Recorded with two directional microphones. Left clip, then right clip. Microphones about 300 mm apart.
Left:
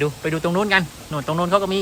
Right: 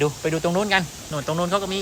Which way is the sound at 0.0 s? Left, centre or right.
Centre.